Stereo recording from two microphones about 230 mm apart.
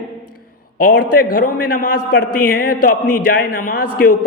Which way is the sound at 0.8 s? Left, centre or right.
Left.